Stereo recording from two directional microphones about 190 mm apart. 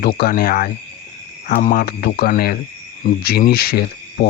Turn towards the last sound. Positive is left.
turn(degrees=55)  # may be behind; listen again after turning